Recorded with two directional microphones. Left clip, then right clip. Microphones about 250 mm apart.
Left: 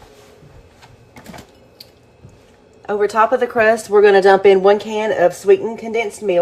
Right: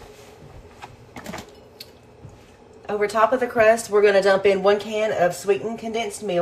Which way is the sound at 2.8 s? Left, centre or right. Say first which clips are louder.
Left 5 dB; left.